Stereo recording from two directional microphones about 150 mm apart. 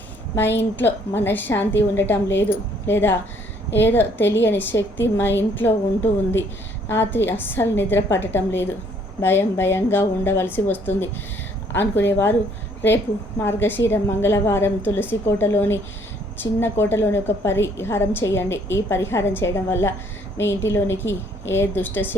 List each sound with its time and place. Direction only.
0.3 s a woman's voice: 15° left (ahead or behind)
6.8 s a woman's voice: 15° left (ahead or behind)